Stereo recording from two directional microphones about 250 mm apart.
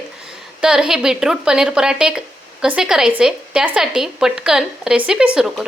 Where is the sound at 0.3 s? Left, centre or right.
Centre.